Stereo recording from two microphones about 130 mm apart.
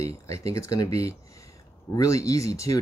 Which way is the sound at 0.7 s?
25° left (ahead or behind).